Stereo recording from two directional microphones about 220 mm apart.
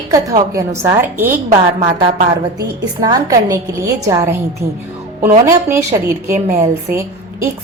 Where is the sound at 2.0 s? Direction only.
20° right (ahead or behind).